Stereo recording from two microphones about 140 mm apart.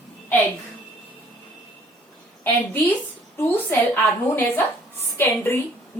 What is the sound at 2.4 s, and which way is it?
A woman's voice, 15° left (ahead or behind).